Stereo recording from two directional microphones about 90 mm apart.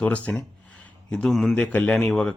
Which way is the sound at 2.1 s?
5° left (ahead or behind).